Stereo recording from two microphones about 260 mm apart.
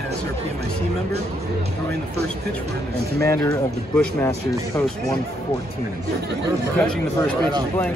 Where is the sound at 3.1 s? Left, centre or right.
Centre.